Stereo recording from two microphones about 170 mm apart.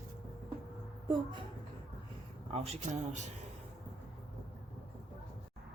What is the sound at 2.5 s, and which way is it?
Speech, 35° right (ahead or behind).